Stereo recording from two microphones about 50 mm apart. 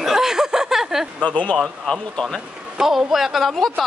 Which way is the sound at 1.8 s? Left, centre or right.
Centre.